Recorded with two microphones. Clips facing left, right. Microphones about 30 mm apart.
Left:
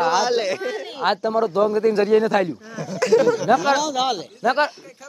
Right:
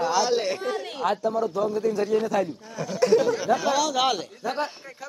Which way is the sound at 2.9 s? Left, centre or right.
Left.